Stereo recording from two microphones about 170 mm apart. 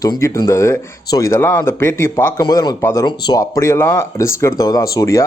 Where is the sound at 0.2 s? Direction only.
15° left (ahead or behind).